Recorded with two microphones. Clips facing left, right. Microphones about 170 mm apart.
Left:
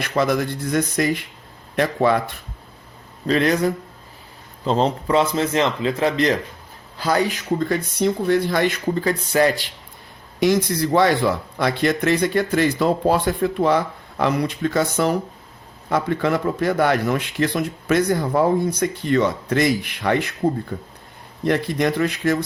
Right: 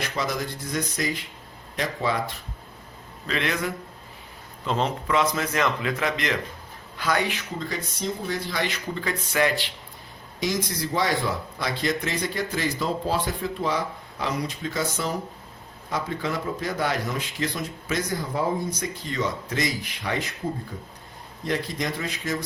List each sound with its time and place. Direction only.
0.0 s speech: 60° left (ahead or behind)
3.2 s speech: 35° left (ahead or behind)
7.7 s speech: 65° left (ahead or behind); by 9.6 s 35° left (ahead or behind)
10.4 s speech: 60° left (ahead or behind)